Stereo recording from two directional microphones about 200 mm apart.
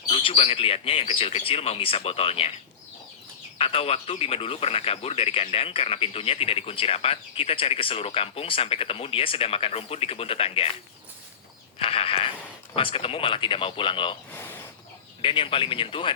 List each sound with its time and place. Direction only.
0.1 s speech: 30° left (ahead or behind)
3.6 s speech: 30° left (ahead or behind)
11.8 s a sound: 30° left (ahead or behind)
12.7 s speech: 30° left (ahead or behind)
15.2 s speech: 25° left (ahead or behind)